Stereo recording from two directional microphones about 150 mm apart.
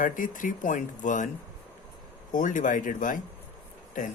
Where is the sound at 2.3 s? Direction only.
60° left (ahead or behind).